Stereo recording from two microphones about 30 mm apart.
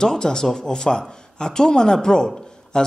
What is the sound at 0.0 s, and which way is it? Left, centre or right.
Speech, centre.